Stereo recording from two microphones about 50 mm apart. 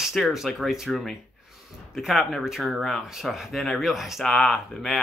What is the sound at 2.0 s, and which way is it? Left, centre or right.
Speech, centre.